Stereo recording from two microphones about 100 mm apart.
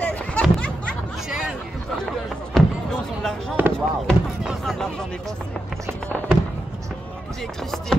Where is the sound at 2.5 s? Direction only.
5° left (ahead or behind).